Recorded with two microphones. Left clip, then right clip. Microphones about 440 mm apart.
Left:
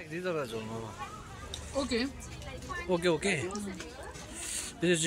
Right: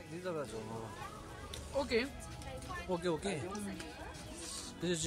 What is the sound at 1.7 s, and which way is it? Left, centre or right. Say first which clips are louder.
Speech: left 2 dB; right.